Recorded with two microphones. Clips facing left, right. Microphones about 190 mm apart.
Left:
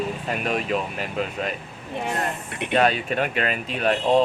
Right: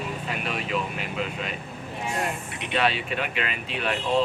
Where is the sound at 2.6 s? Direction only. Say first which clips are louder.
Left 5 dB; 45° left (ahead or behind).